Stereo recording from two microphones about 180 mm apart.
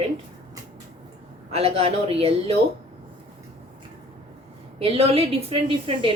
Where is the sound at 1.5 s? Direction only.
35° right (ahead or behind).